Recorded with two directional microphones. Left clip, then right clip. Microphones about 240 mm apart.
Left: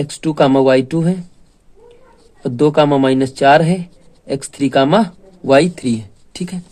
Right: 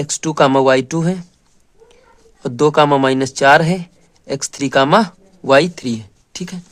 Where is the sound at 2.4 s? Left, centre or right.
Right.